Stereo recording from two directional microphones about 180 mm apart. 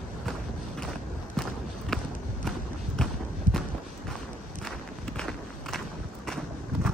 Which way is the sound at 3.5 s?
45° left (ahead or behind).